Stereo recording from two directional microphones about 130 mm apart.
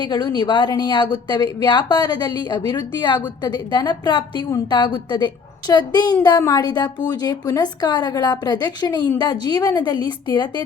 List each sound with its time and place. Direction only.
0.0 s a woman's voice: 35° left (ahead or behind)